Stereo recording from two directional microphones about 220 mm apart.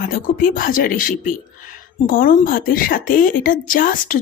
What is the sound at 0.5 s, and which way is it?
Speech, 40° left (ahead or behind).